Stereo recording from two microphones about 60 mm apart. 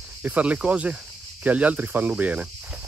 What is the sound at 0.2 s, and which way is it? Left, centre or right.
Speech, right.